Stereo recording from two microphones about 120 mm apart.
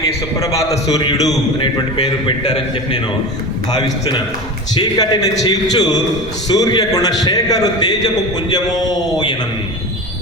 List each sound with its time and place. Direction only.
0.3 s a man's voice: 25° left (ahead or behind)
3.7 s a man's voice: 35° left (ahead or behind)